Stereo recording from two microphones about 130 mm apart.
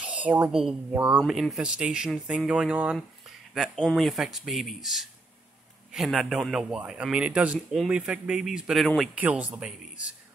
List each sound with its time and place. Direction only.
0.0 s speech: 10° right (ahead or behind)
9.1 s speech: 10° right (ahead or behind)